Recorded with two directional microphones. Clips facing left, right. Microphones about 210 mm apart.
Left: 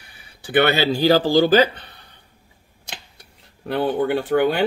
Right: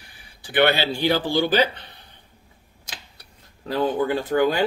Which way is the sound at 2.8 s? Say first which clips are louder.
Left 3 dB; 60° left (ahead or behind).